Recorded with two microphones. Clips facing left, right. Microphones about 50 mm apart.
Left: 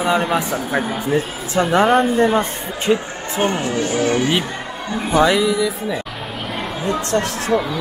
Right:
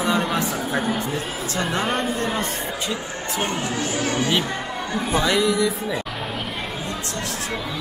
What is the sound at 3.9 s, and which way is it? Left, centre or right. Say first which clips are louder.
Speech: left 6 dB; left.